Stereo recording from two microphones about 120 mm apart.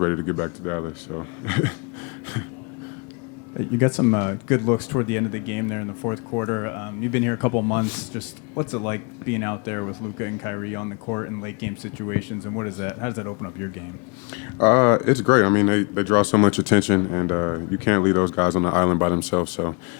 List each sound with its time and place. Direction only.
0.0 s speech: 25° left (ahead or behind)
3.5 s speech: 25° left (ahead or behind)